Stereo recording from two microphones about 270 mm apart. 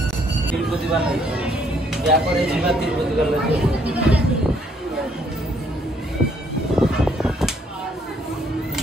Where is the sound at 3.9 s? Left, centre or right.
Centre.